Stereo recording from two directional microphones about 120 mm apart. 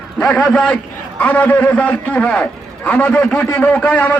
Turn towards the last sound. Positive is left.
turn(degrees=10)  # may be behind; listen again after turning